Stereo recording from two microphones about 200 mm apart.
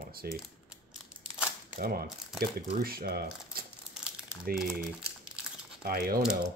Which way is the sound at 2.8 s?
50° right (ahead or behind).